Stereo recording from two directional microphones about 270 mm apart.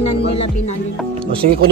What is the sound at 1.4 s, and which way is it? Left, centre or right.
Speech, right.